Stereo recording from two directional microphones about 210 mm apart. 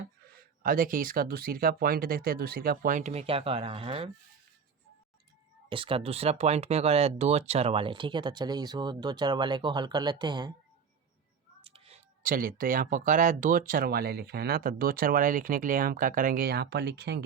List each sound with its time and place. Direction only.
0.3 s speech: 45° right (ahead or behind); by 4.1 s 25° right (ahead or behind)
5.6 s speech: 25° right (ahead or behind)
11.6 s a sound: 25° right (ahead or behind)
12.2 s speech: 40° right (ahead or behind)